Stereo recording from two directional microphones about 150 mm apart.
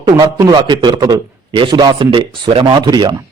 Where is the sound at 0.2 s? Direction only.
30° right (ahead or behind).